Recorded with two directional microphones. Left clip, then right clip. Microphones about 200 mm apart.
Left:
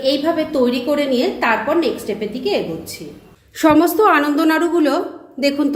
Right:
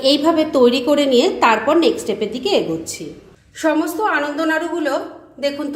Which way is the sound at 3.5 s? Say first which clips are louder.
Left 5 dB; 35° left (ahead or behind).